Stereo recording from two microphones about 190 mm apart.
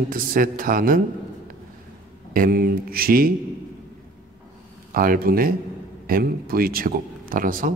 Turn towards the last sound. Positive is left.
turn(degrees=-45)  # may be behind; listen again after turning